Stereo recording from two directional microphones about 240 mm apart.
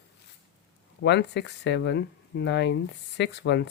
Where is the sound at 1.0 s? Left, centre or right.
Left.